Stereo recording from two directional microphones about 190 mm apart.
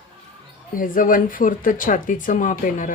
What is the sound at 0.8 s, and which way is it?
Speech, 45° left (ahead or behind).